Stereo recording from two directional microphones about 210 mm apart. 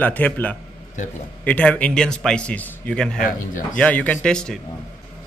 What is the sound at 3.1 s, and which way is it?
Speech, 40° left (ahead or behind).